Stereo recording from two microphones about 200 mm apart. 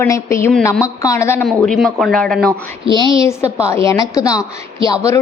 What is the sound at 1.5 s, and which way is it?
A woman's voice, centre (ahead or behind).